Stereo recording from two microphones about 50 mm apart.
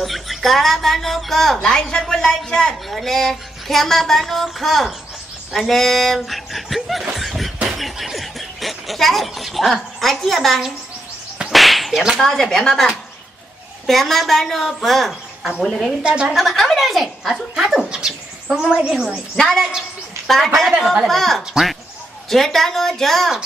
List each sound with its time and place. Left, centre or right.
0.0 s a woman's voice: centre
2.9 s a woman's voice: centre
7.7 s snicker: centre
11.4 s whip: centre
12.2 s a woman's voice: centre
16.0 s a woman's voice: right
16.3 s a woman's voice: centre
17.8 s a woman's voice: centre
19.3 s a woman's voice: centre
21.4 s a woman's voice: centre
22.3 s a woman's voice: centre